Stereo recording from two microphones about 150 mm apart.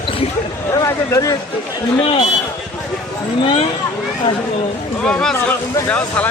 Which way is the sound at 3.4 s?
45° left (ahead or behind).